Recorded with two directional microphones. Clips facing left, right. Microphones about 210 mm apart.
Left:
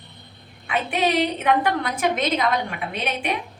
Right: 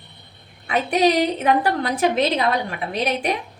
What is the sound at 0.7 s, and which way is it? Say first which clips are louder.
A woman's voice: right 4 dB; 40° right (ahead or behind).